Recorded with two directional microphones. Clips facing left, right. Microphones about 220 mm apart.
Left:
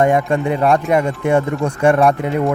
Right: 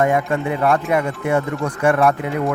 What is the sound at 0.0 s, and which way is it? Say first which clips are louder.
Speech: left 3 dB; 30° left (ahead or behind).